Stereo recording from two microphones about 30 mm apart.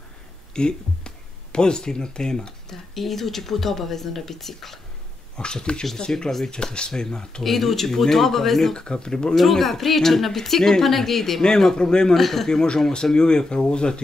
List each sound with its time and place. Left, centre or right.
0.5 s speech: left
2.7 s speech: centre
5.4 s speech: left
7.4 s speech: centre
8.7 s speech: left
9.3 s speech: centre
11.4 s speech: left
12.1 s speech: centre
12.9 s speech: left